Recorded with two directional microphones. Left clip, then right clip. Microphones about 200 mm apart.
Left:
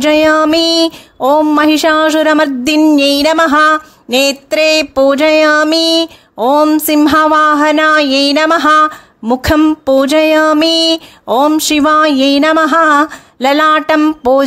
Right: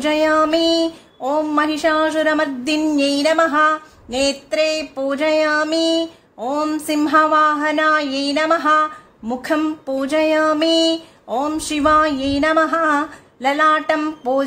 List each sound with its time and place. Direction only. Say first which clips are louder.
0.0 s child singing: left 7 dB; 45° left (ahead or behind)